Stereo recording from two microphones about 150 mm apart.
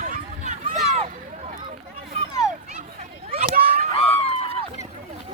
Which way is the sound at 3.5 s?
80° right.